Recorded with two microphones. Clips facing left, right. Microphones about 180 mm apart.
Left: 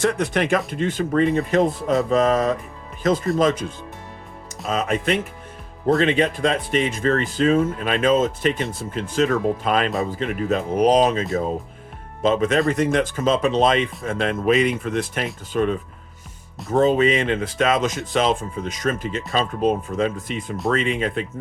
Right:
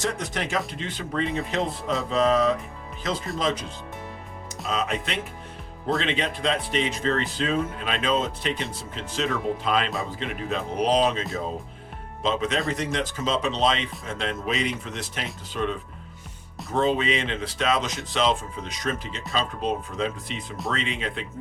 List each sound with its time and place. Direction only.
0.0 s speech: 60° left (ahead or behind)
4.7 s speech: 50° left (ahead or behind)
12.2 s speech: 50° left (ahead or behind)
16.7 s speech: 45° left (ahead or behind)